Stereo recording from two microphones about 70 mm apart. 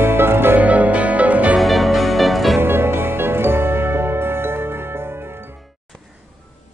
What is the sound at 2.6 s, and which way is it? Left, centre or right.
Music, right.